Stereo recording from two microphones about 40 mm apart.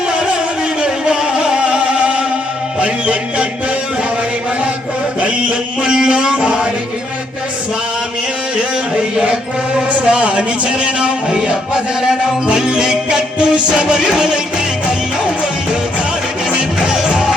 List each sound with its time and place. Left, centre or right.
0.8 s music: centre
5.2 s mantra: right
10.1 s music: right
16.5 s music: right